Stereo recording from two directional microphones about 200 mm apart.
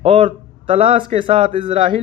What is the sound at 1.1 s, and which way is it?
Speech, 25° right (ahead or behind).